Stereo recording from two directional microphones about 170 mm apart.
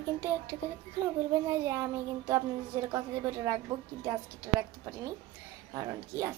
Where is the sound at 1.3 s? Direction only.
15° right (ahead or behind).